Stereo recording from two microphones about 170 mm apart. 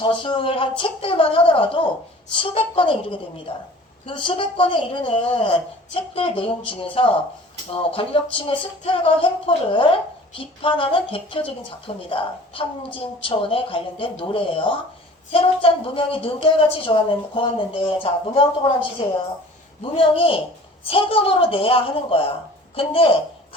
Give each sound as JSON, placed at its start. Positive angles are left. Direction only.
{"t": 0.0, "sound": "a woman's voice", "side_deg": 30}